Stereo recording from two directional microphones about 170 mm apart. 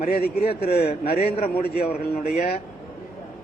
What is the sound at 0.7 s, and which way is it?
A man's voice, 35° left (ahead or behind).